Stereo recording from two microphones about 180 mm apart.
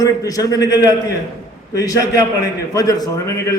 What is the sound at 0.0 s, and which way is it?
A man's voice, 20° left (ahead or behind).